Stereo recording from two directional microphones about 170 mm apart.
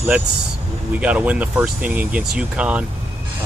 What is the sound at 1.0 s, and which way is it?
Speech, 5° right (ahead or behind).